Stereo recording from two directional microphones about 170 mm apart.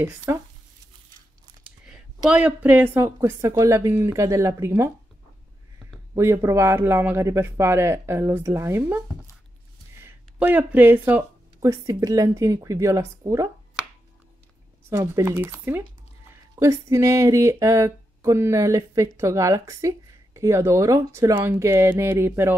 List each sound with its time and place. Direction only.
0.0 s speech: 15° right (ahead or behind)
1.6 s speech: 5° right (ahead or behind)
6.1 s speech: 15° right (ahead or behind)
10.0 s speech: 10° right (ahead or behind)
14.9 s speech: 15° right (ahead or behind)